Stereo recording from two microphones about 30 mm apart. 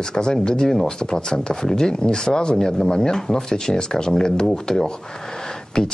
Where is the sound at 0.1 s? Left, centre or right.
Left.